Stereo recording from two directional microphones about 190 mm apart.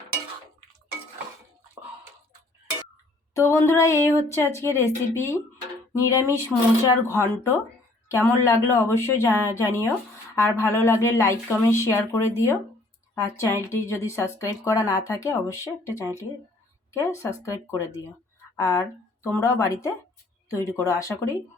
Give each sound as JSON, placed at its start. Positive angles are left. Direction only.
{"t": 3.3, "sound": "a woman's voice", "side_deg": 15}